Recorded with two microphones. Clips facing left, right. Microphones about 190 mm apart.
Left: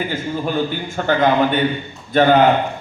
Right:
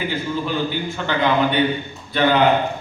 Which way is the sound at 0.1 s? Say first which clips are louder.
Left 2 dB; 45° left (ahead or behind).